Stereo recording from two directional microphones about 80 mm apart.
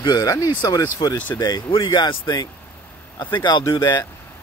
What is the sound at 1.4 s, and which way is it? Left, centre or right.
Speech, left.